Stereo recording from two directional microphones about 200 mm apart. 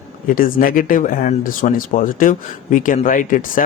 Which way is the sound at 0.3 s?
45° left (ahead or behind).